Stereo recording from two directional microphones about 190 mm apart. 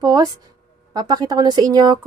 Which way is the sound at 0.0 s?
20° right (ahead or behind).